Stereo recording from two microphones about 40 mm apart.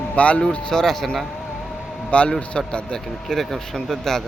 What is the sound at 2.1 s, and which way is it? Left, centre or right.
Speech, left.